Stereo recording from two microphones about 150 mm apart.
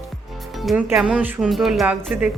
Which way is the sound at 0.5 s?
Centre (ahead or behind).